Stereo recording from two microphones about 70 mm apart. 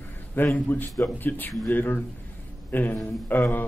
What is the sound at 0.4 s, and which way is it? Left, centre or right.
A man's voice, left.